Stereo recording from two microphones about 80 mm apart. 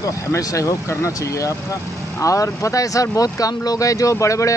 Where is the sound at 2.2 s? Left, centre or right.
Left.